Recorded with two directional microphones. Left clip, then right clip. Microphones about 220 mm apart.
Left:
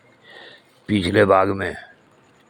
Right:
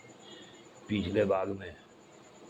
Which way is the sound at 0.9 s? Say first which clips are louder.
Left 13 dB; 35° left (ahead or behind).